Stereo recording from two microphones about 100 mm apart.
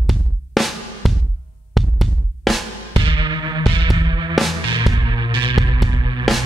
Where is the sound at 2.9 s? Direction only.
55° right (ahead or behind).